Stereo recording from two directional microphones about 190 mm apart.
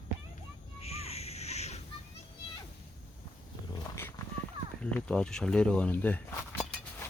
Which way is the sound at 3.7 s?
15° left (ahead or behind).